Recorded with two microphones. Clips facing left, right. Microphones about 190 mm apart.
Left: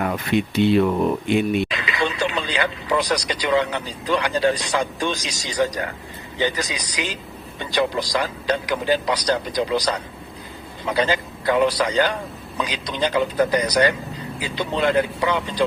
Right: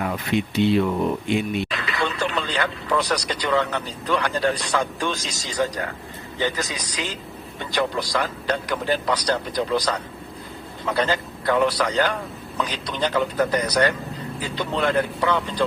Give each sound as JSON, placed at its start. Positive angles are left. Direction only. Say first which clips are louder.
{"t": 0.0, "sound": "speech", "louder": "left 2 dB", "side_deg": 55}
{"t": 1.7, "sound": "speech", "louder": "left 2 dB", "side_deg": 15}